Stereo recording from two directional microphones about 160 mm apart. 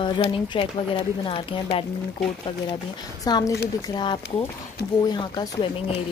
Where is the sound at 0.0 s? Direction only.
30° left (ahead or behind).